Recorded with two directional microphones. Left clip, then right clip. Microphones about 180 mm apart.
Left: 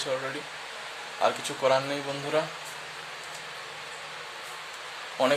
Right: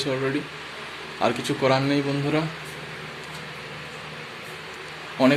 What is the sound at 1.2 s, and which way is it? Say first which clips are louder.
Speech: right 3 dB; 5° left (ahead or behind).